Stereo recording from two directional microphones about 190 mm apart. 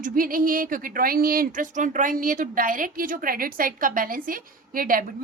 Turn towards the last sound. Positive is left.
turn(degrees=-50)  # may be behind; listen again after turning